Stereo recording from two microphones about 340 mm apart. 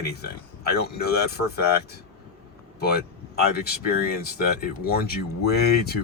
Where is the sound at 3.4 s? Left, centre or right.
Left.